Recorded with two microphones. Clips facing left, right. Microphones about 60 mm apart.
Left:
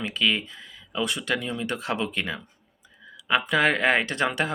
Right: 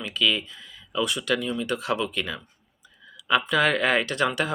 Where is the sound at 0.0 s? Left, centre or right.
Left.